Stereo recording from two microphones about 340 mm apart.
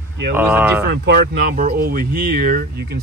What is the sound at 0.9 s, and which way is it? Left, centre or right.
Speech, right.